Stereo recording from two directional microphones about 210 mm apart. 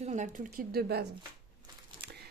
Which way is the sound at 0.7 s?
50° right (ahead or behind).